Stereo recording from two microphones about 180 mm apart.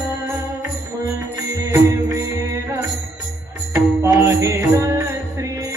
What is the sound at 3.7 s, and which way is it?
Music, 15° right (ahead or behind).